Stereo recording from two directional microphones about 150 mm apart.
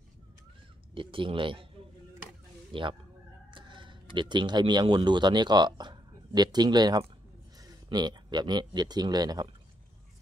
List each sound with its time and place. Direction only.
0.9 s speech: 35° right (ahead or behind)
2.7 s speech: 35° right (ahead or behind)